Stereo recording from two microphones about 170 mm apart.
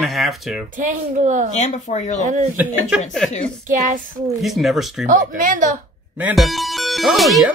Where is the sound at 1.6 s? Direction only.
45° left (ahead or behind).